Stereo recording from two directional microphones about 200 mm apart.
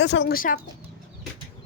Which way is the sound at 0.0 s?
60° left (ahead or behind).